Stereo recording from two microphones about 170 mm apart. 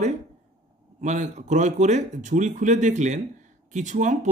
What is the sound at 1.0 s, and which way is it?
Speech, 45° right (ahead or behind).